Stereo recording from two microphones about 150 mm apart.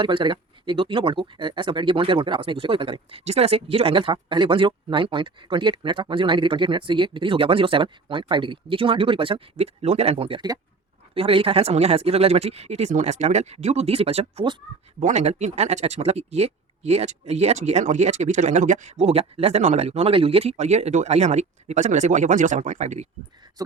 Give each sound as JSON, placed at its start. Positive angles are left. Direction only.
{"t": 0.0, "sound": "speech", "side_deg": -35}
{"t": 14.9, "sound": "speech", "side_deg": -50}
{"t": 23.6, "sound": "speech", "side_deg": -25}